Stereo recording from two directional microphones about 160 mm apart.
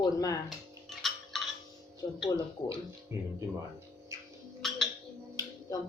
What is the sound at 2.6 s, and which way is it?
Speech, 20° left (ahead or behind).